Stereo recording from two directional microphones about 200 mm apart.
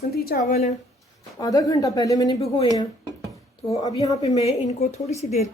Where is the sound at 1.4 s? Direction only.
20° left (ahead or behind).